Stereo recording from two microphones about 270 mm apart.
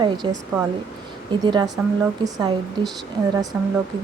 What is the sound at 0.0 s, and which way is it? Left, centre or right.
Speech, centre.